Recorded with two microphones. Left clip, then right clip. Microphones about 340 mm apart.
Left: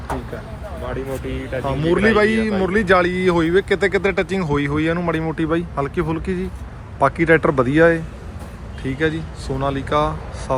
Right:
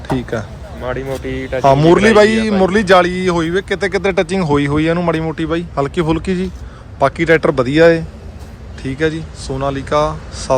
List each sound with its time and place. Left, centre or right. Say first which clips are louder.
0.9 s speech: right 6 dB; right
1.6 s a man's voice: right 9 dB; centre